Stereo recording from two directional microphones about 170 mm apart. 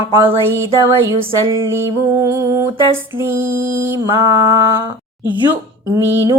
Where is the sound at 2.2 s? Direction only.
15° right (ahead or behind).